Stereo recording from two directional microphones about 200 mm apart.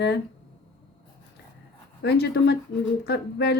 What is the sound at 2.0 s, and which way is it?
Speech, 55° left (ahead or behind).